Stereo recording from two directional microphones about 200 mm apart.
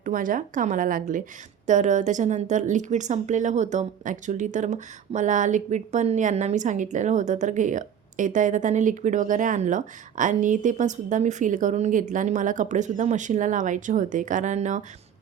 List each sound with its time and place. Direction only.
0.0 s a woman's voice: 40° right (ahead or behind)